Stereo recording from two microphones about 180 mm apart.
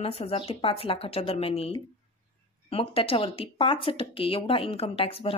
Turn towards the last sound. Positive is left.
turn(degrees=30)  # may be behind; listen again after turning